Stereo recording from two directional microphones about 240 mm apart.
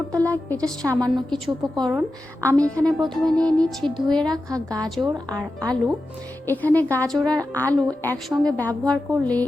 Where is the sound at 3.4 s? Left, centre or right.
Centre.